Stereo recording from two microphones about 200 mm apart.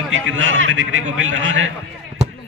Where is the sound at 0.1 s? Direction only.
75° right (ahead or behind).